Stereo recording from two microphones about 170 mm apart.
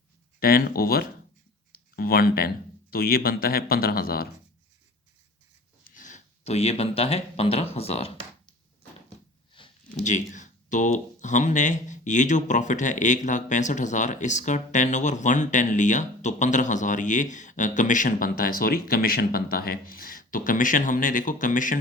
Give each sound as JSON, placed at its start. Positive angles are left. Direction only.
{"t": 0.3, "sound": "speech", "side_deg": 60}
{"t": 1.7, "sound": "a sound", "side_deg": 60}
{"t": 2.9, "sound": "speech", "side_deg": 60}
{"t": 5.8, "sound": "speech", "side_deg": 50}
{"t": 9.6, "sound": "a sound", "side_deg": 30}
{"t": 10.0, "sound": "speech", "side_deg": 45}